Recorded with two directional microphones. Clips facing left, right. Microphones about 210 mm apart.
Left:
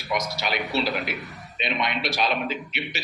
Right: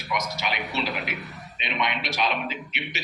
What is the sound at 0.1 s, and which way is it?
Speech, 35° left (ahead or behind).